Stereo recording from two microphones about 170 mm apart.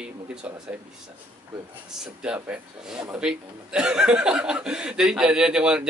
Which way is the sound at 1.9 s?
5° right (ahead or behind).